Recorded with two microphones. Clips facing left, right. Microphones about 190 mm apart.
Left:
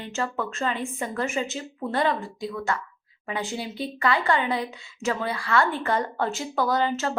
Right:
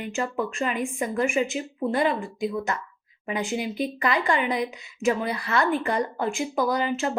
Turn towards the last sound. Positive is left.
turn(degrees=-15)  # may be behind; listen again after turning